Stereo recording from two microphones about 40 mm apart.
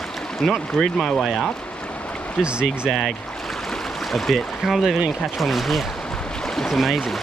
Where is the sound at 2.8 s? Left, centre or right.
Centre.